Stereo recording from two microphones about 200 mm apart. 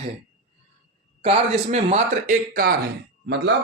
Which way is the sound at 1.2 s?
30° right (ahead or behind).